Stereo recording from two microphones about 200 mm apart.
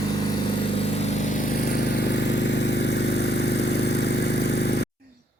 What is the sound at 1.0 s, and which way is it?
Vehicle, 35° left (ahead or behind).